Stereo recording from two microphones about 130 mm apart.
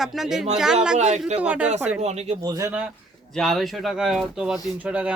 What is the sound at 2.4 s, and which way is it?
Speech, 30° right (ahead or behind).